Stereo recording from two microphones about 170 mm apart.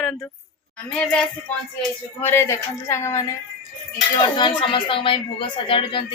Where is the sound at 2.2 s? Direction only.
15° left (ahead or behind).